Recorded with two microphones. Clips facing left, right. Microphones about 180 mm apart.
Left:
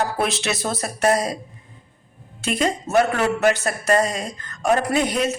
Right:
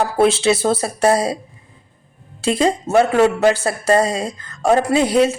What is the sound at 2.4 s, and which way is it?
A man's voice, 30° right (ahead or behind).